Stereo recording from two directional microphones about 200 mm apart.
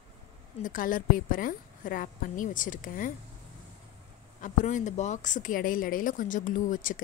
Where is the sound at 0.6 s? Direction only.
45° left (ahead or behind).